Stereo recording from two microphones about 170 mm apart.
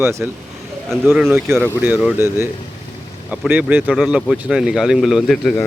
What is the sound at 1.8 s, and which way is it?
Speech, 10° right (ahead or behind).